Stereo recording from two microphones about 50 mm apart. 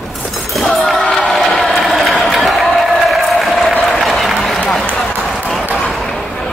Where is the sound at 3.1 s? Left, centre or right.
Centre.